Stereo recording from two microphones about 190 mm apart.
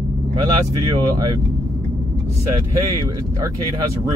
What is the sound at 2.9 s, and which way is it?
Speech, 20° right (ahead or behind).